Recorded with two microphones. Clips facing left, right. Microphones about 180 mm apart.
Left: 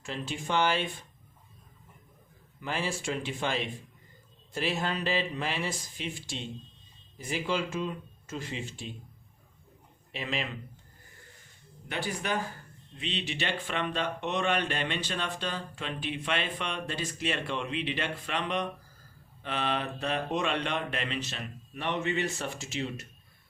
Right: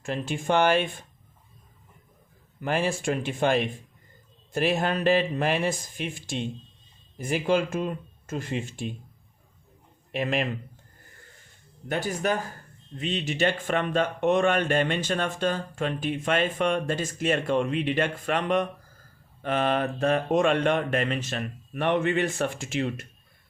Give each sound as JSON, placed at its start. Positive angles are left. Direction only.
{"t": 0.0, "sound": "speech", "side_deg": -50}
{"t": 2.6, "sound": "speech", "side_deg": -55}
{"t": 10.1, "sound": "speech", "side_deg": -55}
{"t": 11.9, "sound": "speech", "side_deg": -45}